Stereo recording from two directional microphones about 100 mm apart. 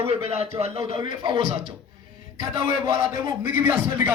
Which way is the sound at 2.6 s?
35° right (ahead or behind).